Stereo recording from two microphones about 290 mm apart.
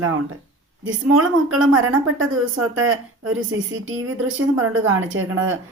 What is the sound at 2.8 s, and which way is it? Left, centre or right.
Speech, right.